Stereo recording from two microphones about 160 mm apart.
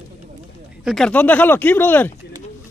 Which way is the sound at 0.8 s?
5° left (ahead or behind).